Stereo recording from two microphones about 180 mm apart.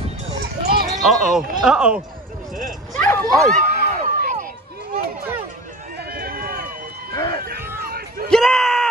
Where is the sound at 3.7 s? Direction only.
45° right (ahead or behind).